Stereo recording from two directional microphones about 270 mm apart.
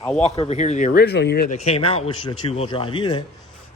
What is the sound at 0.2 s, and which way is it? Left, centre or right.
A man's voice, left.